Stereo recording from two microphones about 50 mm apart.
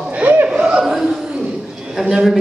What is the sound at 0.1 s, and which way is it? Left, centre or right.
Chatter, right.